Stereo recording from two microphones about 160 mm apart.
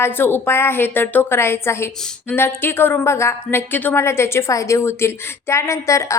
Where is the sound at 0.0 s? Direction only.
15° left (ahead or behind).